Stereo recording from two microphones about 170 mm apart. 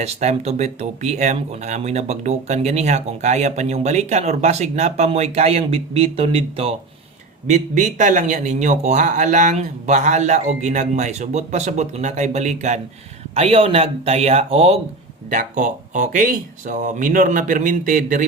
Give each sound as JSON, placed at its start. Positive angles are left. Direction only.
{"t": 0.0, "sound": "speech", "side_deg": -40}
{"t": 15.3, "sound": "speech", "side_deg": -50}